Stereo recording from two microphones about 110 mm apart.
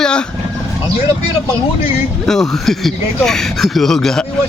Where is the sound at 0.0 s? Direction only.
10° left (ahead or behind).